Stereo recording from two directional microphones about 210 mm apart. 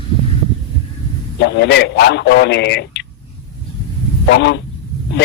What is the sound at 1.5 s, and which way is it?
A man's voice, 50° left (ahead or behind).